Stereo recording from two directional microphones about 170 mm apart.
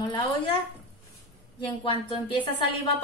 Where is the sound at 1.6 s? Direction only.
30° left (ahead or behind).